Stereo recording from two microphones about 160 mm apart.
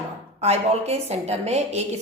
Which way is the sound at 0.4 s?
40° right (ahead or behind).